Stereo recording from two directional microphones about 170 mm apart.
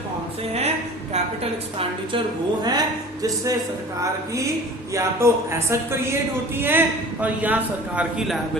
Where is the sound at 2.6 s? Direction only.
25° right (ahead or behind).